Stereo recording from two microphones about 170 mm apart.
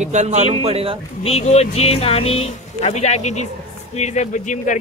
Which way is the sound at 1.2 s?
35° left (ahead or behind).